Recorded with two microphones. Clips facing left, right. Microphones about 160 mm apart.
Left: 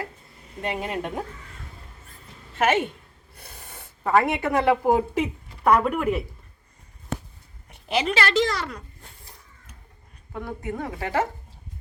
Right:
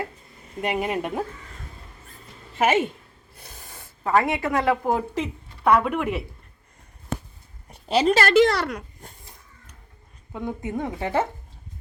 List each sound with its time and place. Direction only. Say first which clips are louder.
0.6 s speech: right 3 dB; 10° right (ahead or behind)
2.6 s speech: right 1 dB; 10° right (ahead or behind)
4.8 s speech: left 3 dB; 15° left (ahead or behind)
7.7 s a woman's voice: right 5 dB; 35° right (ahead or behind)
8.4 s speech: right 6 dB; 65° right (ahead or behind)
10.3 s speech: right 2 dB; 20° right (ahead or behind)